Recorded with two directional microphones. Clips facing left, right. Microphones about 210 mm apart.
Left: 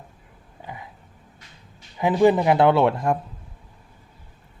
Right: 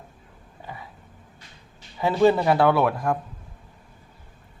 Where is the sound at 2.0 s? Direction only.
15° left (ahead or behind).